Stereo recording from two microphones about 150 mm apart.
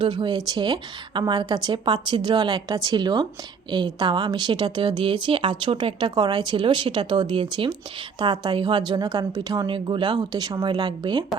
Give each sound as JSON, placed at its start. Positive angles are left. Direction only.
{"t": 0.0, "sound": "a woman's voice", "side_deg": -30}